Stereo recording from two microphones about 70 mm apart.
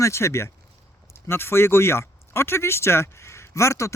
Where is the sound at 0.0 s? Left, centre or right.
Left.